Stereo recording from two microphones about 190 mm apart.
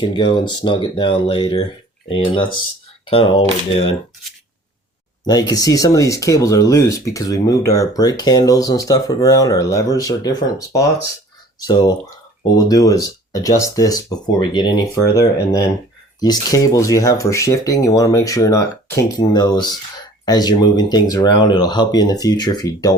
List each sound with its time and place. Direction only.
0.0 s speech: 25° left (ahead or behind)
5.2 s speech: 20° left (ahead or behind)